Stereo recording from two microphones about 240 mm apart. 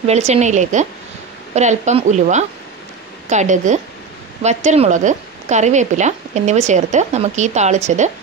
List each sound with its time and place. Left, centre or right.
0.0 s speech: right